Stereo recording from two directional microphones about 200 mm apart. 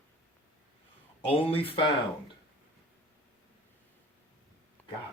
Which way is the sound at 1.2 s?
25° left (ahead or behind).